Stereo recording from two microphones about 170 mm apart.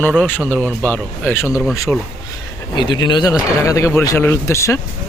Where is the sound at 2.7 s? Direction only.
25° left (ahead or behind).